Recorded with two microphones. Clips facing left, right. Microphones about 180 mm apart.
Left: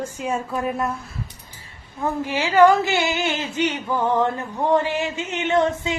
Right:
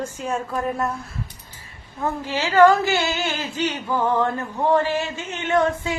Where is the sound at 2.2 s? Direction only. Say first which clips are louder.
Even; 15° left (ahead or behind).